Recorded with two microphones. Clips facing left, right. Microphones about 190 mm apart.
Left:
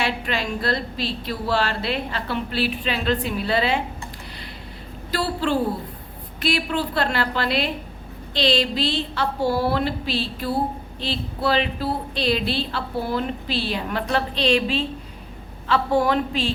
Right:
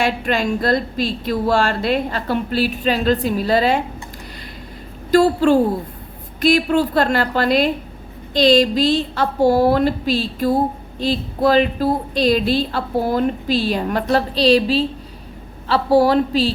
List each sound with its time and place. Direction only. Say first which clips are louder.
0.0 s a woman's voice: right 6 dB; 45° right (ahead or behind)
5.1 s a woman's voice: right 10 dB; 45° right (ahead or behind)